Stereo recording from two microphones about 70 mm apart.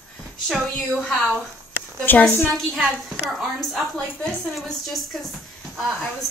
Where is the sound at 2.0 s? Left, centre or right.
Left.